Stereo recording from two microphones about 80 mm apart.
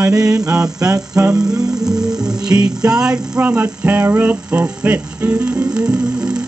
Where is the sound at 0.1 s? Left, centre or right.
Right.